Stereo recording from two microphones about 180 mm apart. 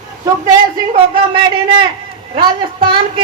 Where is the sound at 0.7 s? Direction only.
30° right (ahead or behind).